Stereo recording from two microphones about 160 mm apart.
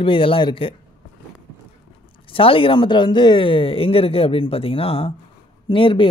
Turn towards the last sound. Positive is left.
turn(degrees=35)  # may be behind; listen again after turning